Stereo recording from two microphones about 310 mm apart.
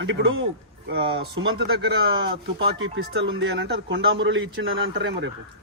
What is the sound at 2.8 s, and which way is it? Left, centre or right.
Speech, right.